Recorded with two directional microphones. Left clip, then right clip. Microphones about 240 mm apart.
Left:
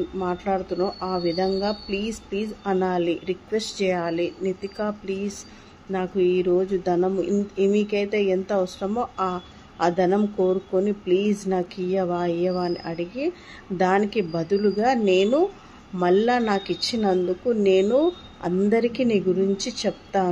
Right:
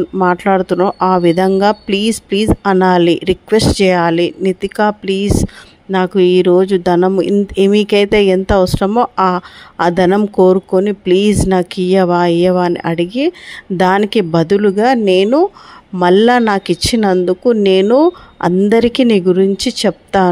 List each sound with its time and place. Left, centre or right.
0.2 s speech: right